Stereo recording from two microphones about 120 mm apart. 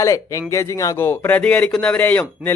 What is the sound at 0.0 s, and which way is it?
A man's voice, 25° left (ahead or behind).